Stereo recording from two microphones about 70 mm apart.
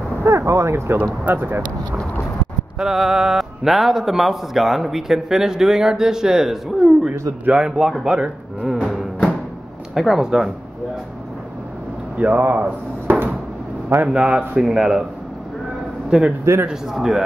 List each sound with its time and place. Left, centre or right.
0.2 s a sound: right
1.2 s speech: right
2.8 s speech: centre
7.4 s speech: centre
8.6 s music: centre
9.9 s speech: centre
12.2 s speech: right
13.9 s speech: centre
16.5 s a man's voice: right
16.9 s speech: centre